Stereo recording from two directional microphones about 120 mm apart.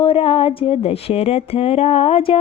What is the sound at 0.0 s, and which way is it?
Speech, 50° left (ahead or behind).